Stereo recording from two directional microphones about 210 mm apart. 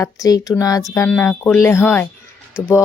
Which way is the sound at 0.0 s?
15° left (ahead or behind).